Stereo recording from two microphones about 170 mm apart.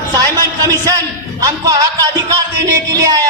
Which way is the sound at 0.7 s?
20° right (ahead or behind).